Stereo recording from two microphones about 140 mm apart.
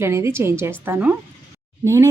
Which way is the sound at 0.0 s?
20° right (ahead or behind).